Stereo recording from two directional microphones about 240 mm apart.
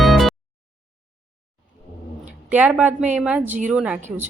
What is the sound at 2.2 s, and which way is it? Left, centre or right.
A woman's voice, centre.